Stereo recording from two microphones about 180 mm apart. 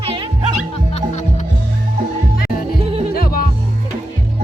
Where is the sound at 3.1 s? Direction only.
55° left (ahead or behind).